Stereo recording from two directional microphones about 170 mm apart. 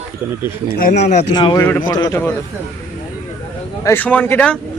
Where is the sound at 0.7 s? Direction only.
55° left (ahead or behind).